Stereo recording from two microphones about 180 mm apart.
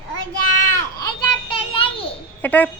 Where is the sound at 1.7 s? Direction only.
30° left (ahead or behind).